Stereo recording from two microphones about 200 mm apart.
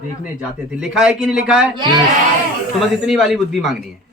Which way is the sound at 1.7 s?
25° right (ahead or behind).